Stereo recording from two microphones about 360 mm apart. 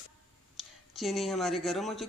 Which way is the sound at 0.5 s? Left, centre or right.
Centre.